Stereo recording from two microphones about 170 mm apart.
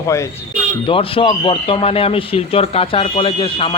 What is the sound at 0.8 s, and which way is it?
Speech, 30° left (ahead or behind).